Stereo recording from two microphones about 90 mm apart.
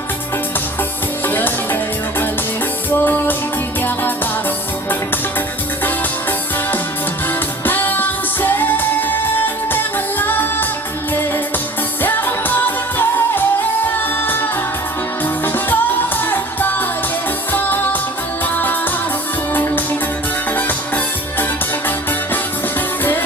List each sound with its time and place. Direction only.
1.3 s music: 20° left (ahead or behind)
7.6 s music: 20° left (ahead or behind)
12.0 s music: 20° left (ahead or behind)